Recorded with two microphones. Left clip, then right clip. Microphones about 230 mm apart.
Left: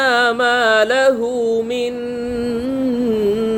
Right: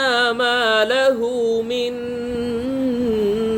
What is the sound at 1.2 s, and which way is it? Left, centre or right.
Music, left.